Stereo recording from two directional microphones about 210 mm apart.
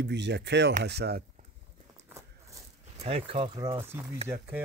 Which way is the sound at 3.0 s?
25° right (ahead or behind).